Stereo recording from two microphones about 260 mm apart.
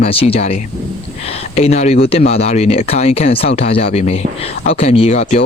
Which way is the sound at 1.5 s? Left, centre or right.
Left.